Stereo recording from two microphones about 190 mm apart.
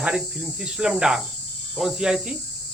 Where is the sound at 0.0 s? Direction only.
5° right (ahead or behind).